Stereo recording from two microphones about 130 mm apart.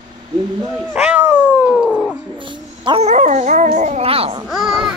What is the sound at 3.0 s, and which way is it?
Dog, 65° right (ahead or behind).